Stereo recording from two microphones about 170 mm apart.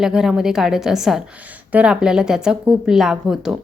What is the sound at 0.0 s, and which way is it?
A woman's voice, 5° right (ahead or behind).